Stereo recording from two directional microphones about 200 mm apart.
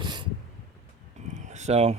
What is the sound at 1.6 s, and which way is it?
Speech, 30° right (ahead or behind).